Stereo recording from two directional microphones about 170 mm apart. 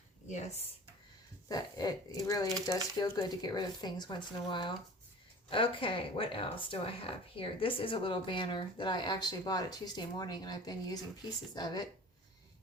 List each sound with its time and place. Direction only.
0.3 s speech: 40° left (ahead or behind)
1.5 s speech: 25° left (ahead or behind)